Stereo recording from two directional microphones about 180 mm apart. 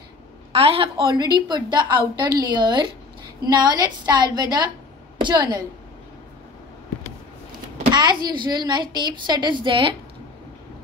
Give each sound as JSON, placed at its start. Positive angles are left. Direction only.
{"t": 0.5, "sound": "a woman's voice", "side_deg": -30}
{"t": 7.9, "sound": "a woman's voice", "side_deg": -25}